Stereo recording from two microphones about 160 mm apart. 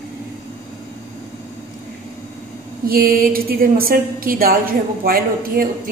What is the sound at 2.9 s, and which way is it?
A woman's voice, 65° right (ahead or behind).